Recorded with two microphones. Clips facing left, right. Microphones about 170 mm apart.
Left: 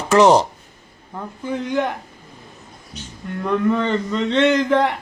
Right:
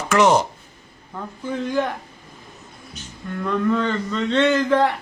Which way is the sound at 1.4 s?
15° left (ahead or behind).